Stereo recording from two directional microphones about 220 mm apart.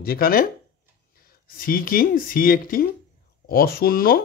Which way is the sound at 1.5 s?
40° left (ahead or behind).